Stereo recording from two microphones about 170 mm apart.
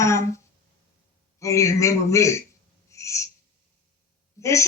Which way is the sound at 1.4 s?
15° left (ahead or behind).